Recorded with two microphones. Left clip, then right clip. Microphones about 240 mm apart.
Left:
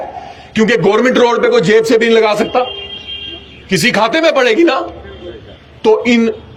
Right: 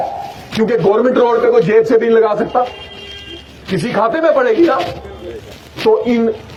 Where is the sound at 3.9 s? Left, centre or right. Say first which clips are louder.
Right 1 dB; left.